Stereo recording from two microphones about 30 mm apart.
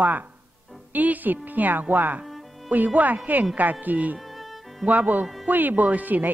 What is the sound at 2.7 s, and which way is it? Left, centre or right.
A woman's voice, right.